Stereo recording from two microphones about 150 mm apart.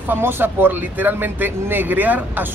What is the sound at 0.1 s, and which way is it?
Speech, 15° right (ahead or behind).